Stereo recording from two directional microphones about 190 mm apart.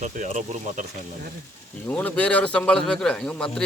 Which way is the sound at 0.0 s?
40° right (ahead or behind).